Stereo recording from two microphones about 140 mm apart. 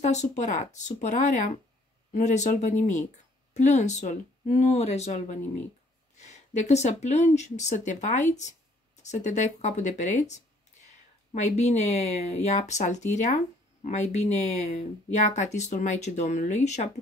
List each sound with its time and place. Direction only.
0.0 s speech: 55° left (ahead or behind)